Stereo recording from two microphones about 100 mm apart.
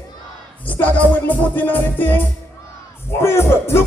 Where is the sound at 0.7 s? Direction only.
15° left (ahead or behind).